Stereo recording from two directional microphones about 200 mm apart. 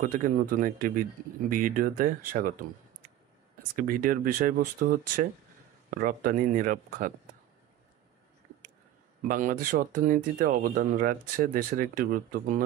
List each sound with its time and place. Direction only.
0.0 s speech: 45° right (ahead or behind)
3.7 s speech: 45° right (ahead or behind)
9.3 s speech: 45° right (ahead or behind)